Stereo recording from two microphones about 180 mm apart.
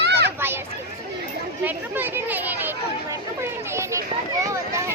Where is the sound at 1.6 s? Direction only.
10° right (ahead or behind).